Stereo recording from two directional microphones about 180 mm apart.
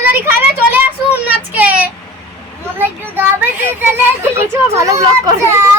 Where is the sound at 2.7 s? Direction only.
10° right (ahead or behind).